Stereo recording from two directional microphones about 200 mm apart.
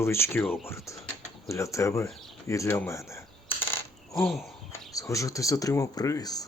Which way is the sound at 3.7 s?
10° left (ahead or behind).